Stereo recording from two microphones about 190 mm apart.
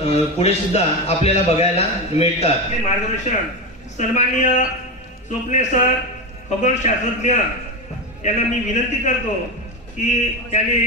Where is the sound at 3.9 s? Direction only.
40° left (ahead or behind).